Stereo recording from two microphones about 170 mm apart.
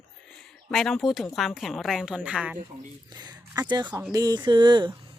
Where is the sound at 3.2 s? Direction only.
25° right (ahead or behind).